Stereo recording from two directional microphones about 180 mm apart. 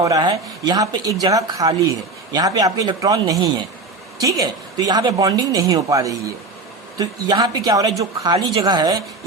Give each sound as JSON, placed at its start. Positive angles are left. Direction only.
{"t": 0.0, "sound": "speech", "side_deg": -20}